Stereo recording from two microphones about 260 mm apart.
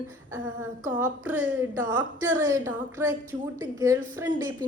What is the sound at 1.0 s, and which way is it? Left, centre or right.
A woman's voice, centre.